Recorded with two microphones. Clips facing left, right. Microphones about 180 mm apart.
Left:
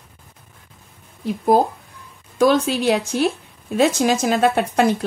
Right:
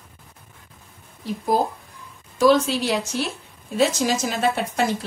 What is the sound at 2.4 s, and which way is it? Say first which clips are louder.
Speech: left 1 dB; 55° left (ahead or behind).